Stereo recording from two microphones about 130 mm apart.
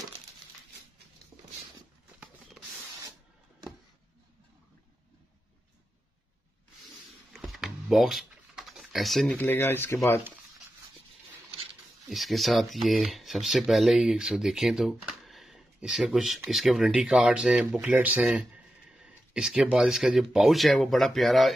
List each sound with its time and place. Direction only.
7.3 s typing: centre (ahead or behind)
9.4 s speech: 15° left (ahead or behind)
12.1 s speech: centre (ahead or behind)